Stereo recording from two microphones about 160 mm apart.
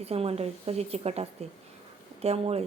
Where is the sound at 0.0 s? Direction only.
40° right (ahead or behind).